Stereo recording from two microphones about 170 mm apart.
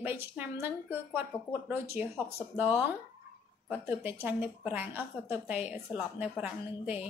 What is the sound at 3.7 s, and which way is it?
A woman's voice, 10° right (ahead or behind).